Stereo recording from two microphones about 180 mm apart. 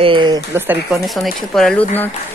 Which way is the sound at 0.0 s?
25° right (ahead or behind).